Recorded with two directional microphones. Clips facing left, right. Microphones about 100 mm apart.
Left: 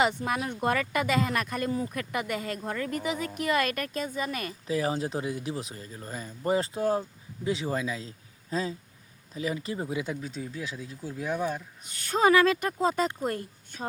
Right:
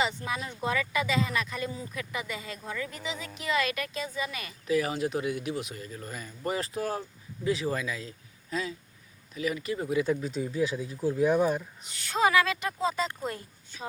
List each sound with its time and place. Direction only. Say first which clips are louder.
0.3 s speech: left 4 dB; 60° left (ahead or behind)
4.6 s speech: right 2 dB; 30° left (ahead or behind)
10.1 s speech: right 6 dB; centre (ahead or behind)
11.9 s speech: left 3 dB; 45° left (ahead or behind)